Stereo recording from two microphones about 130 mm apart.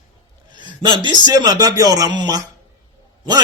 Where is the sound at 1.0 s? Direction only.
35° right (ahead or behind).